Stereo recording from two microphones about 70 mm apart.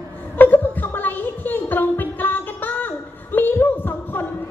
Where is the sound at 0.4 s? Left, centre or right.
Left.